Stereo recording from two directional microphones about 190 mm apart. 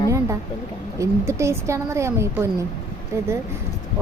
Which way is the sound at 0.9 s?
15° right (ahead or behind).